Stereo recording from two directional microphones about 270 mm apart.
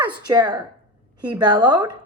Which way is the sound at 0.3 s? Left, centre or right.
Centre.